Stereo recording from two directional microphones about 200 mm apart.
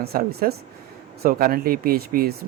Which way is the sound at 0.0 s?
50° right (ahead or behind).